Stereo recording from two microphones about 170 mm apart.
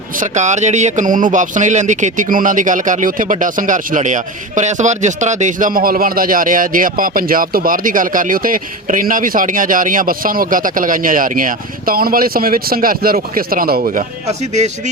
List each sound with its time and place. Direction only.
0.2 s speech: 45° right (ahead or behind)
14.3 s speech: 40° right (ahead or behind)